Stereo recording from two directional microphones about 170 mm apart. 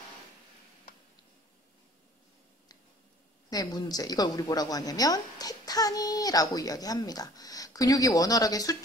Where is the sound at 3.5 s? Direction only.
20° left (ahead or behind).